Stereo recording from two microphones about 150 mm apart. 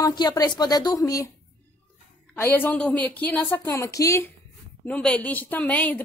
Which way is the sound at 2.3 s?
15° left (ahead or behind).